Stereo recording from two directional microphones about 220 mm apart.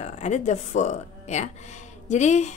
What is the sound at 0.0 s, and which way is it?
Speech, 30° left (ahead or behind).